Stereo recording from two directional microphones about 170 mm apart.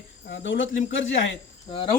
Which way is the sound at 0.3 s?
80° left.